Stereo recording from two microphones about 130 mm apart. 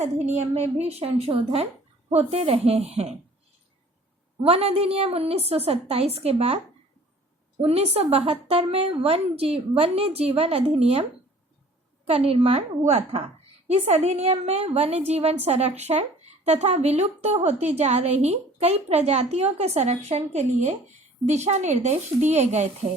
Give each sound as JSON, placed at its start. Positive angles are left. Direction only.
{"t": 0.0, "sound": "speech", "side_deg": -55}
{"t": 4.4, "sound": "speech", "side_deg": -45}
{"t": 7.6, "sound": "speech", "side_deg": -50}
{"t": 12.0, "sound": "a woman's voice", "side_deg": -50}